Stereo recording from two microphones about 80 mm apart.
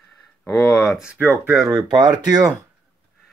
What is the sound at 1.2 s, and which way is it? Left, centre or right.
Speech, right.